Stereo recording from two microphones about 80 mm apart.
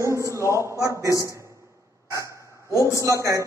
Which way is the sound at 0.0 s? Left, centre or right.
Right.